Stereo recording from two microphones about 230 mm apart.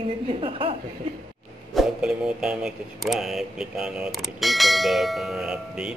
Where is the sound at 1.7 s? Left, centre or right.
Centre.